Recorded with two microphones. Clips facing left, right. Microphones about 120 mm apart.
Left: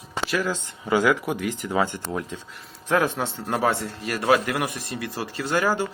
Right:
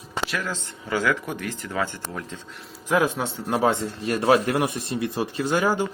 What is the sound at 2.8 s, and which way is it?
A man's voice, 10° right (ahead or behind).